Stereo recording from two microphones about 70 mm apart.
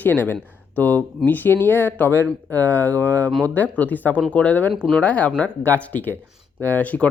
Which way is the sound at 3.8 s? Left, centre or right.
Left.